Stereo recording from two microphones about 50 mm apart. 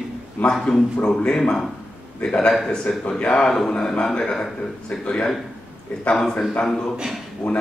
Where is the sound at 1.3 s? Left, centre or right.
Centre.